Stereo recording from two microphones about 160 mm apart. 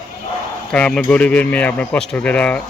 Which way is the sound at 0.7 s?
5° left (ahead or behind).